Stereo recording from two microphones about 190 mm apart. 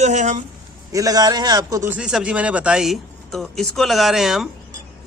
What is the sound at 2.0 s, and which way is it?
A man's voice, 5° right (ahead or behind).